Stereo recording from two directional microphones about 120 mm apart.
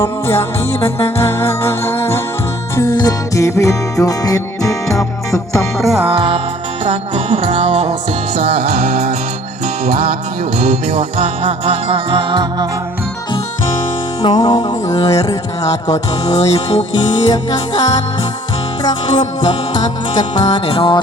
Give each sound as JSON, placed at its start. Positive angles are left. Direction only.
{"t": 0.0, "sound": "music", "side_deg": 20}
{"t": 2.9, "sound": "music", "side_deg": 30}
{"t": 5.8, "sound": "music", "side_deg": -5}
{"t": 6.1, "sound": "music", "side_deg": -50}
{"t": 10.6, "sound": "music", "side_deg": -60}
{"t": 14.2, "sound": "music", "side_deg": 35}